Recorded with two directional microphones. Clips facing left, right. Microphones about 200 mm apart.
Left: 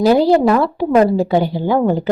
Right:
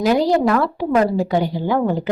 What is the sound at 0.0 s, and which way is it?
A woman's voice, 30° left (ahead or behind).